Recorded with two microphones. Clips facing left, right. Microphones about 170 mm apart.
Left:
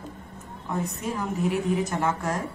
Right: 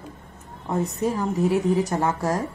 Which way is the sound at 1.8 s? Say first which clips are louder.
Right 3 dB; 35° right (ahead or behind).